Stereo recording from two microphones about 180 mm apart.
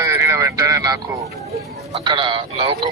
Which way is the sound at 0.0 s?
15° right (ahead or behind).